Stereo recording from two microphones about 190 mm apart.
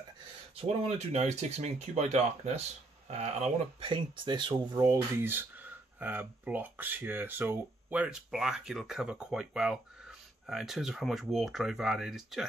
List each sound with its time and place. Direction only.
0.6 s speech: 30° right (ahead or behind); by 12.4 s centre (ahead or behind)